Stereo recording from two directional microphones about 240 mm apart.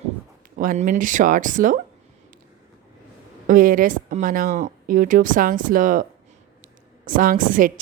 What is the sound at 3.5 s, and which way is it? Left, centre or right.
A woman's voice, right.